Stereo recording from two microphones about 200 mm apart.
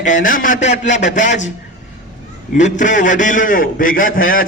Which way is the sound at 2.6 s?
40° left (ahead or behind).